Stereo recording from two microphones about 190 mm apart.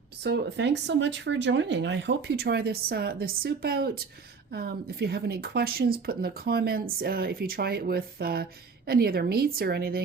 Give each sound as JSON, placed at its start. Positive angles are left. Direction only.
{"t": 0.2, "sound": "speech", "side_deg": -60}